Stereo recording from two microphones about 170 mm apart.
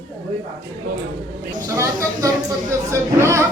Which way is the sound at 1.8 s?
20° right (ahead or behind).